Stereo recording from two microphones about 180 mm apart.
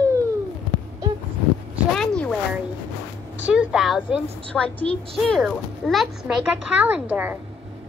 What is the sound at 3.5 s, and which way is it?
A woman's voice, 5° right (ahead or behind).